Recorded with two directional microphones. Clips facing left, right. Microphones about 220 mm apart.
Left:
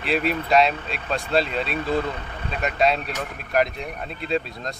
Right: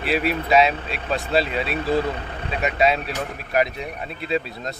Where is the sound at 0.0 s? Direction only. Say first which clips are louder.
Right 1 dB; 5° right (ahead or behind).